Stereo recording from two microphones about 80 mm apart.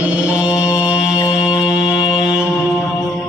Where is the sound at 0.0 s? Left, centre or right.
Centre.